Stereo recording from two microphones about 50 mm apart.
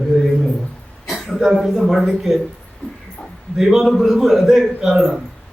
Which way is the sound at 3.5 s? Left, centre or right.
Centre.